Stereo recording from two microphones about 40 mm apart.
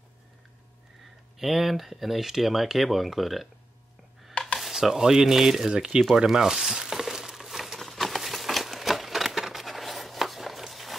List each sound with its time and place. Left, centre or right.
1.4 s speech: centre
4.3 s dishes: left
4.6 s speech: centre
6.1 s a sound: centre